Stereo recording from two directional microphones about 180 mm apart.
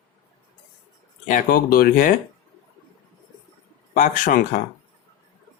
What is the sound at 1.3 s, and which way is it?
Speech, 50° left (ahead or behind).